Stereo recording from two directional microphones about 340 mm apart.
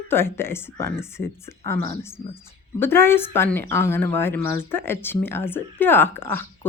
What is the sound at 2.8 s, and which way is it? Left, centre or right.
Speech, centre.